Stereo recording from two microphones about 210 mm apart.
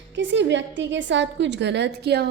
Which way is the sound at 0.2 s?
60° right (ahead or behind).